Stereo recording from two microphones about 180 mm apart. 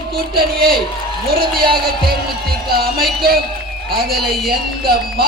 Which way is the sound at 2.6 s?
55° right (ahead or behind).